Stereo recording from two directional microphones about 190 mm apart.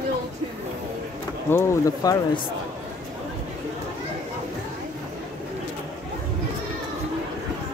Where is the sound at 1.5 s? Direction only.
15° left (ahead or behind).